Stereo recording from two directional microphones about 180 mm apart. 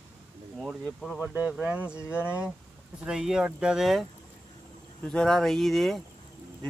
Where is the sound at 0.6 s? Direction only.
Centre (ahead or behind).